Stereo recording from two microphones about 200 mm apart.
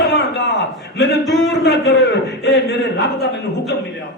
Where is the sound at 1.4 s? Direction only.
60° left (ahead or behind).